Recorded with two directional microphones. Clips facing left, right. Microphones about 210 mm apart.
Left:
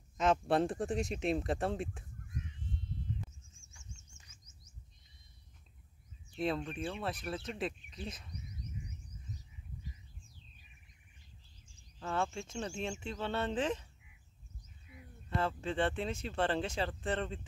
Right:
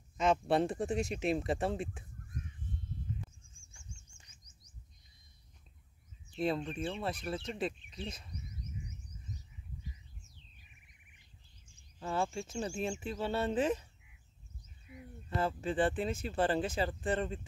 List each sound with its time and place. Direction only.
0.2 s speech: centre (ahead or behind)
3.5 s chirp: 30° right (ahead or behind)
6.3 s speech: centre (ahead or behind)
12.4 s speech: 5° right (ahead or behind)
15.3 s speech: centre (ahead or behind)